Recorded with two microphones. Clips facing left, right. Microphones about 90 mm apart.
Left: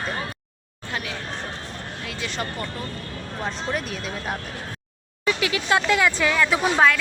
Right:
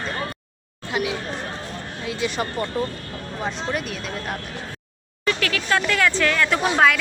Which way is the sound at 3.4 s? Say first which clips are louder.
Right 1 dB; 5° right (ahead or behind).